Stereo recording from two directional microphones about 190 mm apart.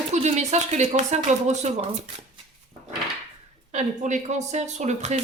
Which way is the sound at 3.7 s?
40° right (ahead or behind).